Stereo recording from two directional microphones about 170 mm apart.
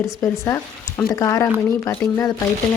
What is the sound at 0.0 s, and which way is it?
Speech, 20° left (ahead or behind).